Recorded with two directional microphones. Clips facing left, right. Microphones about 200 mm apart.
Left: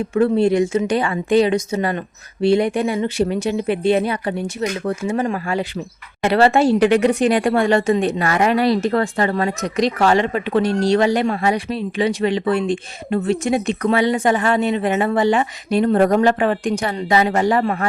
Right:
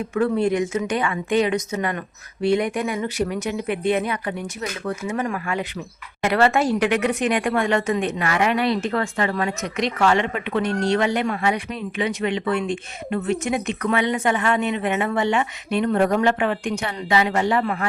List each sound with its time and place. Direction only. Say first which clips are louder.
0.1 s speech: left 5 dB; 30° left (ahead or behind)